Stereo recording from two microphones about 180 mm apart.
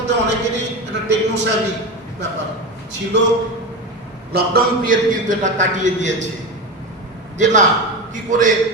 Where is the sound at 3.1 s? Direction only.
80° right.